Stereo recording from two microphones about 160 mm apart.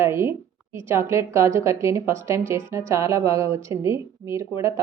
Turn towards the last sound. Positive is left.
turn(degrees=-15)  # may be behind; listen again after turning